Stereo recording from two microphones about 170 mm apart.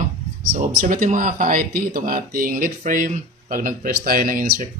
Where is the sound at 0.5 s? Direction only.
50° right (ahead or behind).